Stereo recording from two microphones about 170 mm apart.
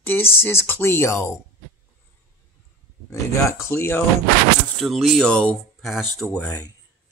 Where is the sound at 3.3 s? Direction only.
15° left (ahead or behind).